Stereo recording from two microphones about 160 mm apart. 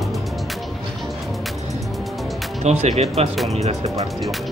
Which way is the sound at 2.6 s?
40° right (ahead or behind).